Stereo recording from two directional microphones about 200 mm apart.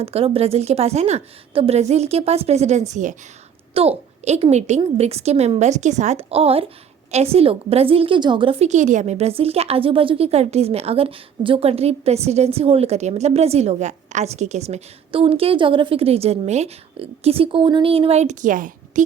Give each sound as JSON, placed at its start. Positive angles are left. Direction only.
{"t": 0.0, "sound": "a woman's voice", "side_deg": -30}